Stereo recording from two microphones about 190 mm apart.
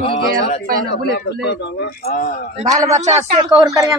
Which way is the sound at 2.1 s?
45° left (ahead or behind).